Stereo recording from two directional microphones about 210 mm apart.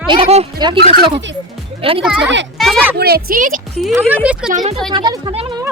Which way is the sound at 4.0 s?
5° right (ahead or behind).